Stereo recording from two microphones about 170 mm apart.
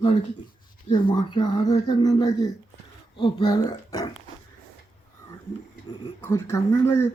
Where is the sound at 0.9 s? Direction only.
25° left (ahead or behind).